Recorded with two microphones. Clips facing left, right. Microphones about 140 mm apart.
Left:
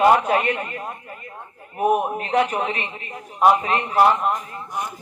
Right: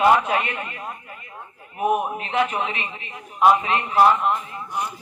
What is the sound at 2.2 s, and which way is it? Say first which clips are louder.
A man's voice: left 2 dB; 35° left (ahead or behind).